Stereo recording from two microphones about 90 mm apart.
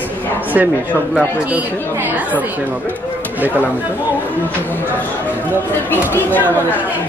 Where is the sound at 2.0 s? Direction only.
20° right (ahead or behind).